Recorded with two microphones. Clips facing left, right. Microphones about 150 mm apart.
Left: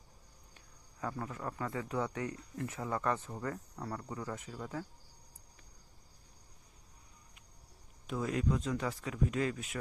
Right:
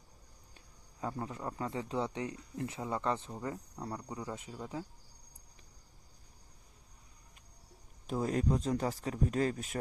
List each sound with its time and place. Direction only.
1.0 s speech: 25° right (ahead or behind)
8.0 s speech: 40° right (ahead or behind)